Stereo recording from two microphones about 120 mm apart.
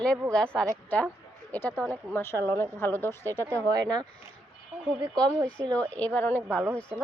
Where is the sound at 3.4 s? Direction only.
30° right (ahead or behind).